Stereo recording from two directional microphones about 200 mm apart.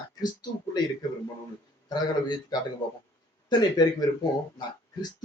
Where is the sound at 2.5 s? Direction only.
20° left (ahead or behind).